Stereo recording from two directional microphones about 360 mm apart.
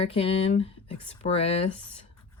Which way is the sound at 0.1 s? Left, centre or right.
Centre.